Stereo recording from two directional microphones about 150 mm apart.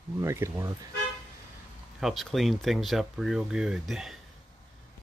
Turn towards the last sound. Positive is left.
turn(degrees=0)  # may be behind; listen again after turning